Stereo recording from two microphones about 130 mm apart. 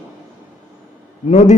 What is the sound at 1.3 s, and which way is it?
Speech, 65° left (ahead or behind).